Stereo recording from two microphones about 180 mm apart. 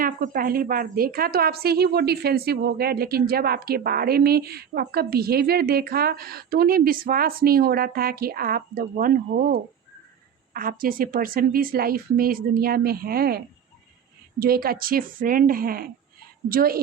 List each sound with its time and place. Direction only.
0.0 s a woman's voice: 50° right (ahead or behind)